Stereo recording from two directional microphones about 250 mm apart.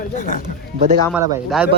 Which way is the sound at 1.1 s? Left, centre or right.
Centre.